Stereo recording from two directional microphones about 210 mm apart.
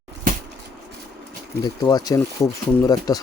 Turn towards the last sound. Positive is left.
turn(degrees=15)  # may be behind; listen again after turning